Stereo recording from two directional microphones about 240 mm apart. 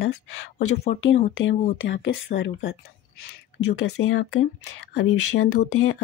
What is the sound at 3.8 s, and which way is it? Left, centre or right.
Speech, left.